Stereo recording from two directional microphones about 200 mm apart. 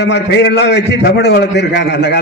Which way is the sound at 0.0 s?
60° left (ahead or behind).